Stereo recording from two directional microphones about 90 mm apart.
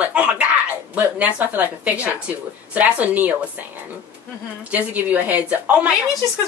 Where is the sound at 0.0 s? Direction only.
15° right (ahead or behind).